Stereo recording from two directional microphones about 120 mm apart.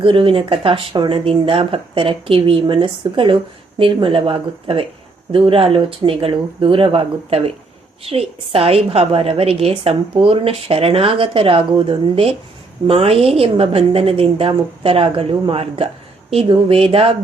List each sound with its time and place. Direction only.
0.0 s a woman's voice: 50° right (ahead or behind)